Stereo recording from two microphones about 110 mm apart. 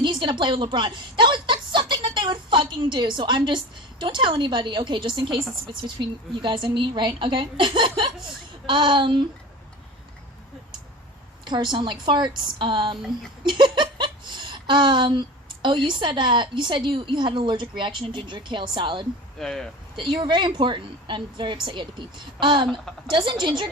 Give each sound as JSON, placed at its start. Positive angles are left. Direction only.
{"t": 0.0, "sound": "a sound", "side_deg": -45}
{"t": 4.0, "sound": "a woman's voice", "side_deg": -45}
{"t": 11.4, "sound": "a woman's voice", "side_deg": -45}
{"t": 13.5, "sound": "a sound", "side_deg": -45}
{"t": 15.9, "sound": "a woman's voice", "side_deg": -45}
{"t": 19.4, "sound": "speech", "side_deg": 5}
{"t": 20.0, "sound": "a woman's voice", "side_deg": -45}